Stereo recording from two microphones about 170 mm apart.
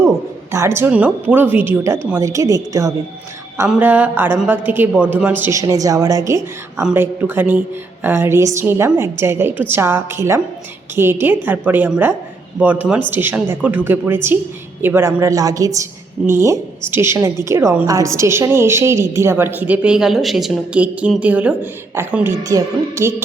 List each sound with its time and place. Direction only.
0.5 s a woman's voice: 15° right (ahead or behind)